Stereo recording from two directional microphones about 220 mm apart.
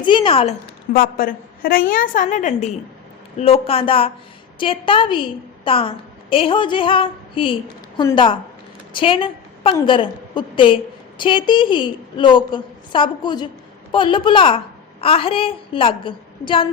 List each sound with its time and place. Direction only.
0.0 s a woman's voice: 20° left (ahead or behind)
0.9 s a woman's voice: 40° left (ahead or behind); by 16.6 s 20° left (ahead or behind)